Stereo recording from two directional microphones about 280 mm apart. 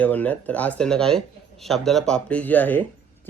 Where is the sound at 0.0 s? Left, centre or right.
Centre.